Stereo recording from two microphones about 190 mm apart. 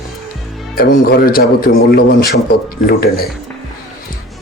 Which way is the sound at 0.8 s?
55° left (ahead or behind).